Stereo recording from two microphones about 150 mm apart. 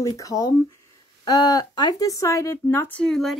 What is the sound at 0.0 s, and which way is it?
Speech, 20° left (ahead or behind).